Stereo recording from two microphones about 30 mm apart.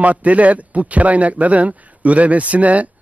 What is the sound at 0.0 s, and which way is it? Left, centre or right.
Speech, right.